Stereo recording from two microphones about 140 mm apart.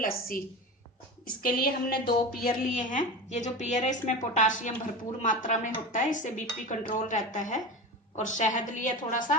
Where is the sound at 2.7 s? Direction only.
60° left (ahead or behind).